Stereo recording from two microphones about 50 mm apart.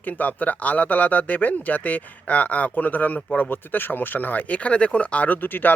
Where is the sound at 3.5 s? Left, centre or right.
Left.